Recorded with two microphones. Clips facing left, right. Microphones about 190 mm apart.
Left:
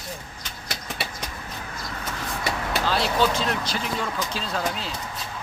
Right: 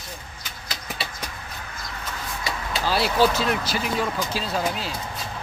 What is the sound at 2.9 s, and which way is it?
Speech, 5° right (ahead or behind).